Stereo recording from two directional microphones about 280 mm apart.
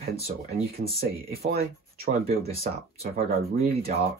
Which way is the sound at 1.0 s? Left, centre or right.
Right.